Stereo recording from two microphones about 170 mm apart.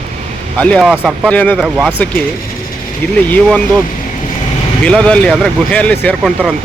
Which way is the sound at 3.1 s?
10° left (ahead or behind).